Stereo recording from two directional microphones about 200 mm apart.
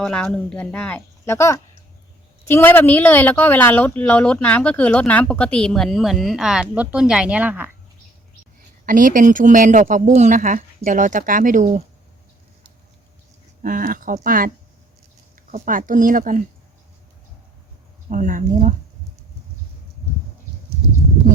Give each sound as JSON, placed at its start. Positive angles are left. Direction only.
{"t": 0.0, "sound": "speech", "side_deg": 5}
{"t": 8.9, "sound": "speech", "side_deg": -40}
{"t": 13.6, "sound": "speech", "side_deg": -45}
{"t": 15.5, "sound": "speech", "side_deg": -40}
{"t": 18.1, "sound": "speech", "side_deg": -40}